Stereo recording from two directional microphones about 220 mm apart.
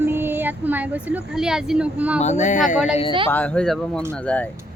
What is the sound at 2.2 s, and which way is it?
Speech, 30° left (ahead or behind).